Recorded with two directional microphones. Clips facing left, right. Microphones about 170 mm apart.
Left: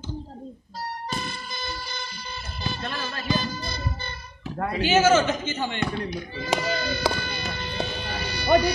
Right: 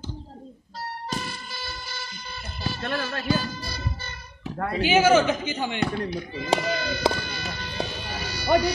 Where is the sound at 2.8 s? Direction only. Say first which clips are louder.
Right 3 dB; 60° right (ahead or behind).